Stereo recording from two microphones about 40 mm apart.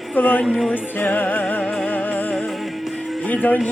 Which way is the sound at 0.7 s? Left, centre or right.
Left.